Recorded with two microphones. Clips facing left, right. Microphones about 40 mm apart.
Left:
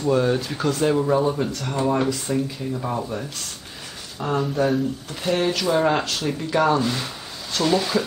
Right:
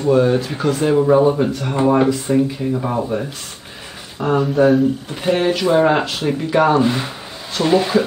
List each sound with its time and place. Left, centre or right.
0.1 s speech: centre